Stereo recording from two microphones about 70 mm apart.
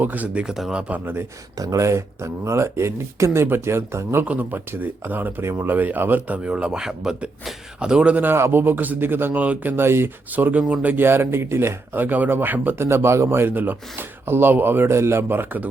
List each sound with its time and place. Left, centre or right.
0.0 s speech: right
0.4 s speech: centre
0.7 s speech: centre
1.0 s a man's voice: right
1.5 s a man's voice: right
4.3 s speech: right
5.4 s speech: right; by 8.2 s centre
8.2 s speech: right
9.7 s speech: right; by 10.9 s centre
10.9 s a man's voice: right
11.9 s speech: right
12.8 s a man's voice: right